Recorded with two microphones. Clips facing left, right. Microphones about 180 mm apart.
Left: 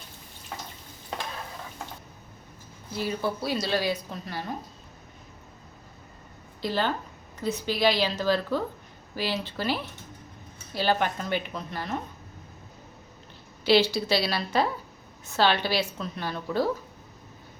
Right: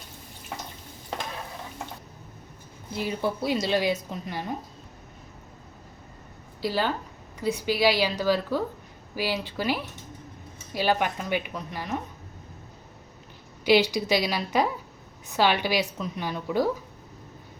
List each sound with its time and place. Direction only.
2.9 s speech: 20° right (ahead or behind)
6.6 s a woman's voice: 10° right (ahead or behind)
13.7 s a woman's voice: 15° right (ahead or behind)